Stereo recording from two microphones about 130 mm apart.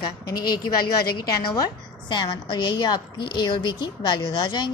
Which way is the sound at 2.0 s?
35° left (ahead or behind).